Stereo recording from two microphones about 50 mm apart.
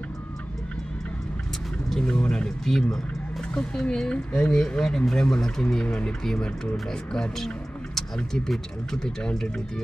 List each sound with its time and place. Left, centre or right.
2.0 s speech: centre
2.6 s speech: centre
3.5 s speech: centre